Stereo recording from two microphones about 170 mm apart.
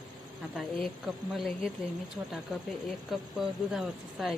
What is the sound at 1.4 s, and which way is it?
Speech, centre (ahead or behind).